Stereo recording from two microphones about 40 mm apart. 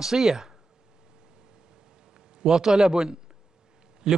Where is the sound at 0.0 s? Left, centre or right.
Centre.